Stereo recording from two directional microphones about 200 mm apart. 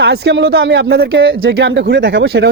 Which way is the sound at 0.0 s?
60° right (ahead or behind).